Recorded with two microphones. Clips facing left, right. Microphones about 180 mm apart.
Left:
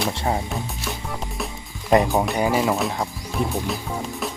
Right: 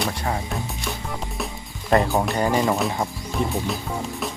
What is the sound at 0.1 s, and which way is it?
Speech, 25° left (ahead or behind).